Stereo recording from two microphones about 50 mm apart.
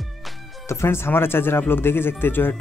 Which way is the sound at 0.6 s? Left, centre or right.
Left.